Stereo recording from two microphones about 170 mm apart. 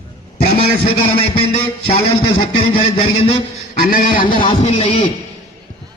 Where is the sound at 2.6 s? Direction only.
35° left (ahead or behind).